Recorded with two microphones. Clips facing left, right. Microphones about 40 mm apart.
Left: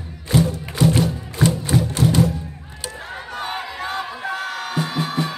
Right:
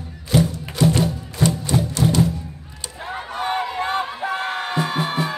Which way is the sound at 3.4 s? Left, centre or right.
Right.